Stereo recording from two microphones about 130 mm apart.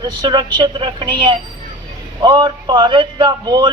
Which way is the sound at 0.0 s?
35° right (ahead or behind).